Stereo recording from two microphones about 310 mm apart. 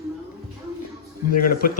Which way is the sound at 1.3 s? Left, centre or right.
Left.